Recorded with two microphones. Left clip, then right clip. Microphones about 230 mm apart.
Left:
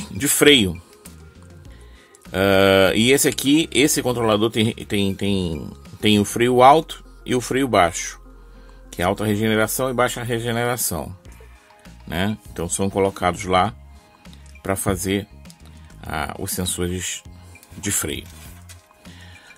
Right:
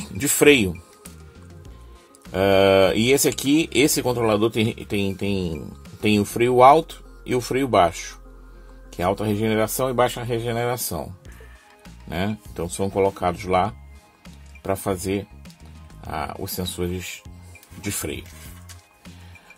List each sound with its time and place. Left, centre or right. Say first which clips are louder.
0.0 s speech: left 1 dB; centre
2.3 s speech: left 1 dB; centre
12.1 s speech: left 3 dB; centre
16.0 s speech: left 2 dB; centre